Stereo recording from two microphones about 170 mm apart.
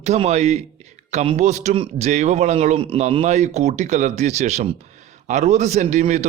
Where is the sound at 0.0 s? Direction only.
40° right (ahead or behind).